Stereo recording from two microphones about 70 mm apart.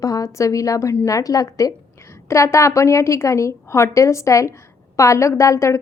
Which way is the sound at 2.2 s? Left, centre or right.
Left.